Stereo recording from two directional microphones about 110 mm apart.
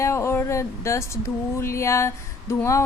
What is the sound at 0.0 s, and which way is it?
Speech, 25° left (ahead or behind).